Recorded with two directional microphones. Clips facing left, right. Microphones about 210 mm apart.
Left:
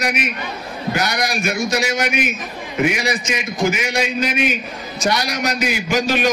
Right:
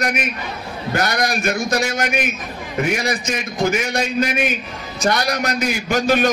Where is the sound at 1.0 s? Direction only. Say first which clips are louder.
Right 2 dB; 50° right (ahead or behind).